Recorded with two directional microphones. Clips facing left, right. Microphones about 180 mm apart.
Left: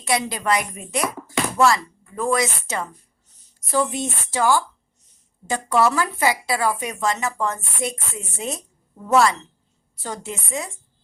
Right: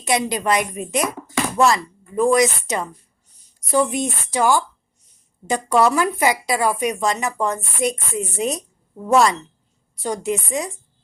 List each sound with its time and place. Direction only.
0.0 s a woman's voice: 20° right (ahead or behind)
9.9 s speech: 15° right (ahead or behind)